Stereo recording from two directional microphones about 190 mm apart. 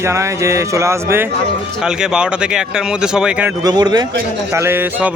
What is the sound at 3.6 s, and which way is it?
Speech, 20° right (ahead or behind).